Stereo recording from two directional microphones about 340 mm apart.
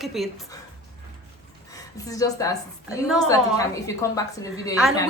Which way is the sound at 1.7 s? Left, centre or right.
Centre.